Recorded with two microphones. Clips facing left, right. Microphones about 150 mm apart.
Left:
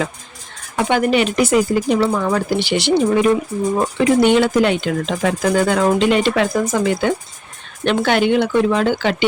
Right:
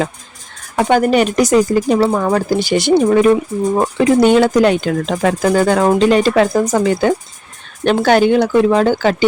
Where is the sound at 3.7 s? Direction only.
35° right (ahead or behind).